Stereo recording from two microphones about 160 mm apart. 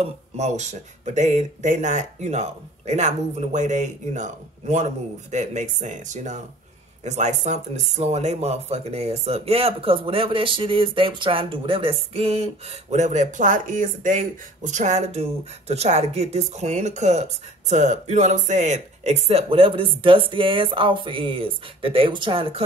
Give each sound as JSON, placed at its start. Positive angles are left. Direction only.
{"t": 0.0, "sound": "speech", "side_deg": -45}